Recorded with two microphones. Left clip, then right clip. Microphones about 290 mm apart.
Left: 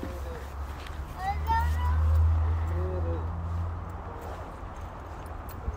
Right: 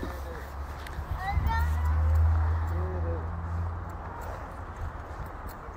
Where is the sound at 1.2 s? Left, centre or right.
Left.